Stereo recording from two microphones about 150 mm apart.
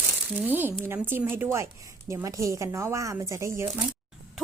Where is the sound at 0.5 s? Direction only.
15° right (ahead or behind).